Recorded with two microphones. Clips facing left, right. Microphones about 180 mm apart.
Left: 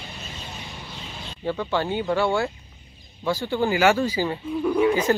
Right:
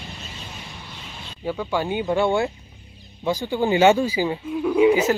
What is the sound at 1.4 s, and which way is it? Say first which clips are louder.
Speech: even; 10° right (ahead or behind).